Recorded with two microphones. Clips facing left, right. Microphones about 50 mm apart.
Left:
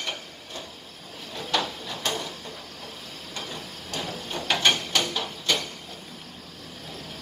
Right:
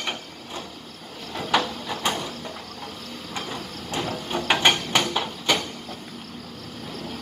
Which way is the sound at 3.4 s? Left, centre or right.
Right.